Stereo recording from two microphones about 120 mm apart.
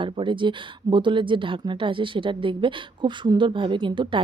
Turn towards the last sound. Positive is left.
turn(degrees=-40)  # may be behind; listen again after turning